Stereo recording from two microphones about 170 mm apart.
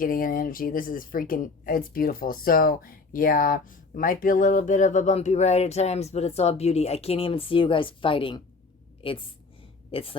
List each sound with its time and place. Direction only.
0.0 s a woman's voice: 55° left (ahead or behind); by 10.2 s 35° left (ahead or behind)